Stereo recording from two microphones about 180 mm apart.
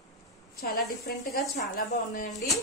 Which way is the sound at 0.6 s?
60° left (ahead or behind).